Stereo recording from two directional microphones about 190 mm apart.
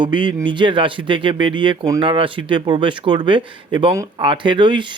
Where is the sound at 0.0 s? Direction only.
25° right (ahead or behind).